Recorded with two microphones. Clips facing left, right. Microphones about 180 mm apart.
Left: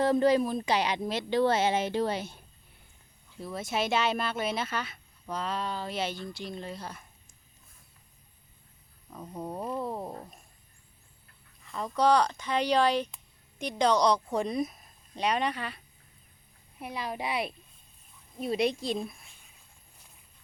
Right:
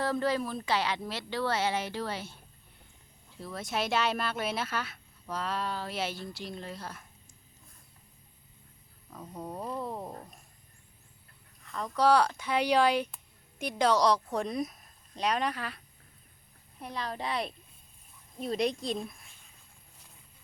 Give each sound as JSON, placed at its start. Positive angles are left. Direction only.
{"t": 0.0, "sound": "a woman's voice", "side_deg": 20}
{"t": 3.3, "sound": "speech", "side_deg": 0}
{"t": 9.2, "sound": "a woman's voice", "side_deg": 20}
{"t": 9.6, "sound": "speech", "side_deg": 5}
{"t": 10.0, "sound": "a woman's voice", "side_deg": 25}
{"t": 11.6, "sound": "a woman's voice", "side_deg": 0}
{"t": 16.8, "sound": "a woman's voice", "side_deg": 10}